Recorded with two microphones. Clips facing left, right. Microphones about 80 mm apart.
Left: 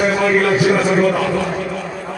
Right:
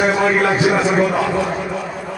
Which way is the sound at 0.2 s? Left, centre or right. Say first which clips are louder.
Left 1 dB; right.